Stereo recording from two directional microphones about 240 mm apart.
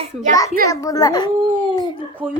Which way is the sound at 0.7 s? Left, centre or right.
Centre.